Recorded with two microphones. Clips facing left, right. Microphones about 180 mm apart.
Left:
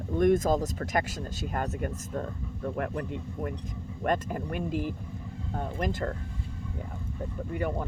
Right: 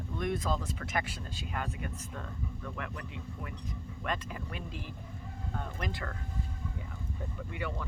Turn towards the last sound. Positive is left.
turn(degrees=45)  # may be behind; listen again after turning